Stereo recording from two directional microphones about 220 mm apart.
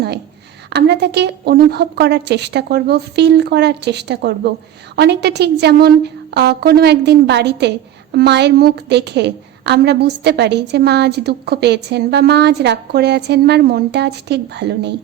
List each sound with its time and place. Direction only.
0.7 s a woman's voice: 50° right (ahead or behind)